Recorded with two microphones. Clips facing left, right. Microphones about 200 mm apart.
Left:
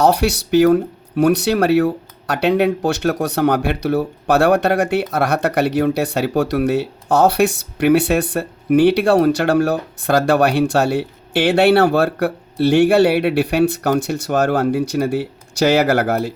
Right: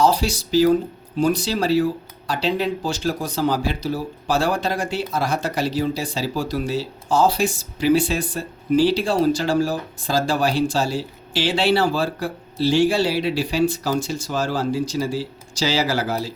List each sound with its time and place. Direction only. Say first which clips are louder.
0.0 s speech: left 4 dB; 65° left (ahead or behind)